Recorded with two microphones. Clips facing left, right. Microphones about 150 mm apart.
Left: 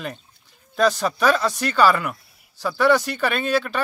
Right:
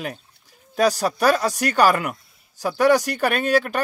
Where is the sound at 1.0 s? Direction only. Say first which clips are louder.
Right 1 dB; 40° right (ahead or behind).